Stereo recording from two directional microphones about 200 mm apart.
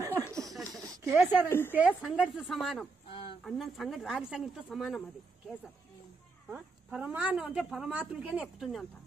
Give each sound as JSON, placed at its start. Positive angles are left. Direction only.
{"t": 0.5, "sound": "a sound", "side_deg": 0}
{"t": 1.2, "sound": "a woman's voice", "side_deg": -10}
{"t": 1.5, "sound": "a woman's voice", "side_deg": 10}
{"t": 3.1, "sound": "a sound", "side_deg": 25}
{"t": 3.4, "sound": "a woman's voice", "side_deg": 0}
{"t": 6.5, "sound": "a woman's voice", "side_deg": -10}